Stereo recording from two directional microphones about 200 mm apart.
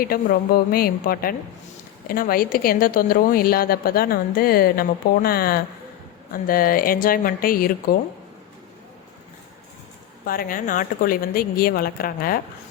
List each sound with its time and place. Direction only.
0.0 s a woman's voice: 45° left (ahead or behind)
10.2 s a woman's voice: 45° left (ahead or behind)